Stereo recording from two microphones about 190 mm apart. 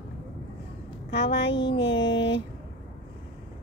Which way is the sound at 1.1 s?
65° left (ahead or behind).